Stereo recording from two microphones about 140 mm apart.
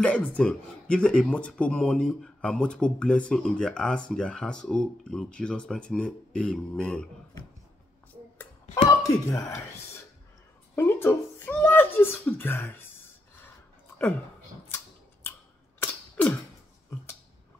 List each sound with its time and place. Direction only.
0.0 s speech: 10° left (ahead or behind)
9.0 s speech: 25° left (ahead or behind)
10.8 s speech: 15° left (ahead or behind)
15.8 s a sound: 10° left (ahead or behind)